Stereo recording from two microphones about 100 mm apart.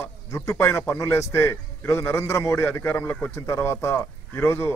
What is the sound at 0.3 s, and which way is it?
Speech, 25° left (ahead or behind).